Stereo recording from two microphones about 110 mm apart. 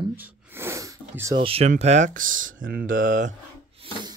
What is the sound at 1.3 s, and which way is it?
Speech, 55° right (ahead or behind).